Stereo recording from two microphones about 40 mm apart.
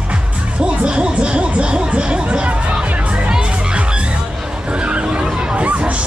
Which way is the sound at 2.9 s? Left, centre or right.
Right.